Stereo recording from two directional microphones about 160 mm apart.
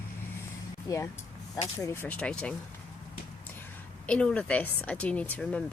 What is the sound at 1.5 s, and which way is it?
Speech, 20° left (ahead or behind).